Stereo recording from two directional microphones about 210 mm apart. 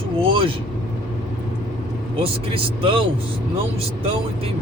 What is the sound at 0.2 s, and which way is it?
Vehicle, 25° right (ahead or behind).